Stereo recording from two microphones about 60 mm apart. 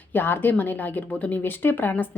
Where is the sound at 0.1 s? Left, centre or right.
Left.